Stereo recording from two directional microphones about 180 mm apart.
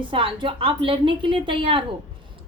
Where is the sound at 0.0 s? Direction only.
30° right (ahead or behind).